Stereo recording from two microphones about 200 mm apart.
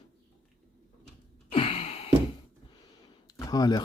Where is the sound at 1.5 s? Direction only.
30° left (ahead or behind).